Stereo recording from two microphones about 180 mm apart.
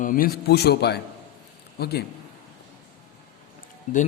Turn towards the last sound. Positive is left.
turn(degrees=45)  # may be behind; listen again after turning